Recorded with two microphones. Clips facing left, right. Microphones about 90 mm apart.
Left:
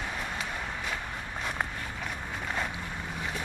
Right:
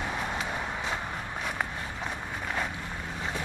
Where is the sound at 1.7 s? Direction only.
25° right (ahead or behind).